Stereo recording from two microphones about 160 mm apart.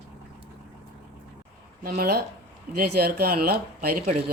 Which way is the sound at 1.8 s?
65° right (ahead or behind).